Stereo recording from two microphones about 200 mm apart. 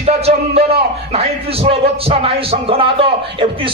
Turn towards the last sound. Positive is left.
turn(degrees=-25)  # may be behind; listen again after turning